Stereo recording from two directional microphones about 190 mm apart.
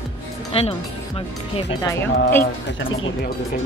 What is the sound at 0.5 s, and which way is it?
Speech, 30° left (ahead or behind).